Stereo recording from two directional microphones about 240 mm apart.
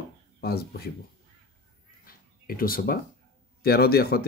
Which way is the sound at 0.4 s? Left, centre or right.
Left.